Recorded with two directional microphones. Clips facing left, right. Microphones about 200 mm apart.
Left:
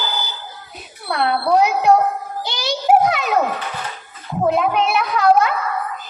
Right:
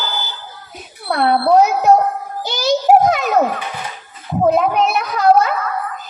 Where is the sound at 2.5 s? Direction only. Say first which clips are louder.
Right 4 dB; 40° right (ahead or behind).